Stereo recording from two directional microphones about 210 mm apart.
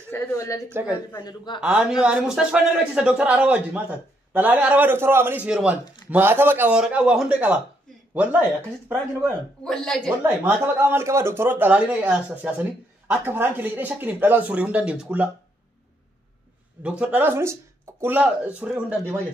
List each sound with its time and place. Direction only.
0.1 s speech: 15° left (ahead or behind)
0.7 s speech: 10° right (ahead or behind)
1.1 s a man's voice: 20° left (ahead or behind)
1.6 s speech: 5° right (ahead or behind)
9.7 s speech: 5° left (ahead or behind)
10.2 s speech: 10° right (ahead or behind)
17.0 s speech: 10° right (ahead or behind)